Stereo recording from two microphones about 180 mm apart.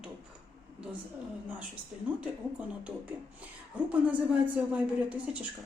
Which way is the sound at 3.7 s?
10° right (ahead or behind).